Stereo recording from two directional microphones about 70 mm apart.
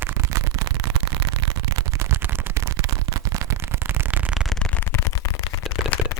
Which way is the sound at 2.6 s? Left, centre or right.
Right.